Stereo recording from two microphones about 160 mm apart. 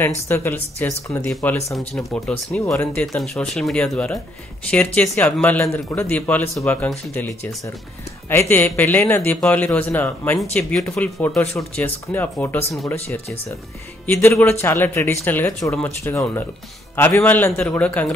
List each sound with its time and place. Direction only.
0.3 s a man's voice: 15° left (ahead or behind)